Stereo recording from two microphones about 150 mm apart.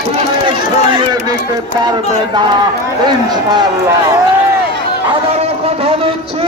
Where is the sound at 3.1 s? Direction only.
30° right (ahead or behind).